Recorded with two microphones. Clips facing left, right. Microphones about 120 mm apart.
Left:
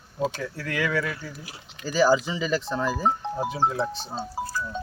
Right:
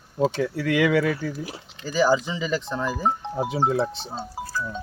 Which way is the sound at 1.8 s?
20° right (ahead or behind).